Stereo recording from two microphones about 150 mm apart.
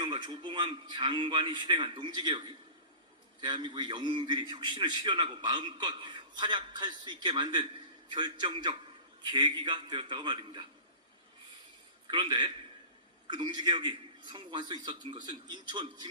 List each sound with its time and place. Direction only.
0.0 s a man's voice: 30° right (ahead or behind)
12.1 s a man's voice: 30° right (ahead or behind)